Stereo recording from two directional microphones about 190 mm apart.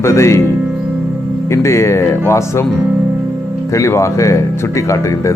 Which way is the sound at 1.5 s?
15° left (ahead or behind).